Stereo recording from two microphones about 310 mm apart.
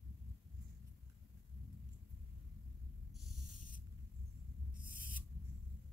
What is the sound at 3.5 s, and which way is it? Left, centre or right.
Spray, left.